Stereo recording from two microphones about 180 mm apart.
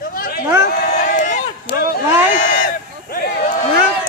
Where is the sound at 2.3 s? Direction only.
40° left (ahead or behind).